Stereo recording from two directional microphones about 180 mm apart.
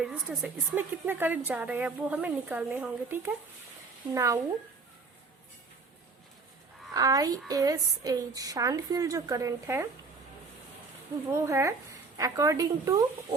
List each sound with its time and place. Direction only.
0.0 s a woman's voice: 5° right (ahead or behind)
6.9 s a woman's voice: 20° right (ahead or behind)
11.3 s speech: 15° right (ahead or behind)